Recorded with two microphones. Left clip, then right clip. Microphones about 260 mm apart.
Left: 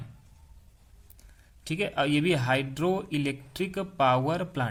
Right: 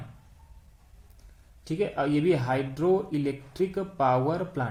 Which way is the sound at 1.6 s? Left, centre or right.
Left.